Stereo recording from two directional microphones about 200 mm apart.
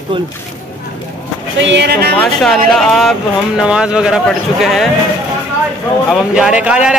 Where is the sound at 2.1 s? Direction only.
Centre (ahead or behind).